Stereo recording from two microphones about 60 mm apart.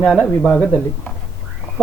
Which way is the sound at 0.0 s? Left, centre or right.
Centre.